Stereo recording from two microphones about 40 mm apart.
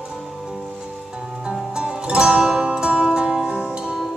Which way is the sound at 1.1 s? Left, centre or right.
Right.